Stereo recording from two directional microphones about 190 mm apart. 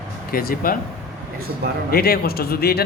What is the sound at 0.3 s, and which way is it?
Speech, 50° left (ahead or behind).